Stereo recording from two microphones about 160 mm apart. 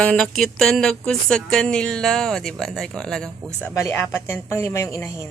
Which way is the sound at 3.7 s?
15° left (ahead or behind).